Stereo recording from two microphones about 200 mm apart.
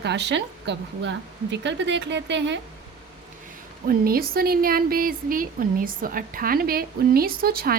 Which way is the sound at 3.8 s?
50° right (ahead or behind).